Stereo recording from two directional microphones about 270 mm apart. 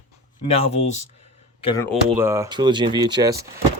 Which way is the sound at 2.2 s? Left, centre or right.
Centre.